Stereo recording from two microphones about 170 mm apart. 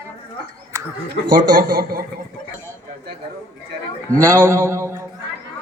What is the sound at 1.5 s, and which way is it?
Speech, 55° right (ahead or behind).